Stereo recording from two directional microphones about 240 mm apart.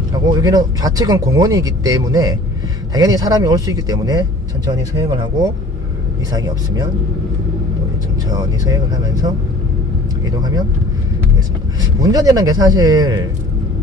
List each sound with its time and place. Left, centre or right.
0.1 s speech: centre
8.3 s speech: centre
12.0 s speech: centre